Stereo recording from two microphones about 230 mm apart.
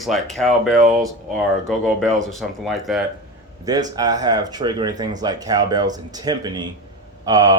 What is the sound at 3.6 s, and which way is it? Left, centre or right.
Speech, centre.